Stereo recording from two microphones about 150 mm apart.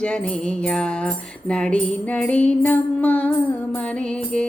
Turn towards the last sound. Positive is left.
turn(degrees=10)  # may be behind; listen again after turning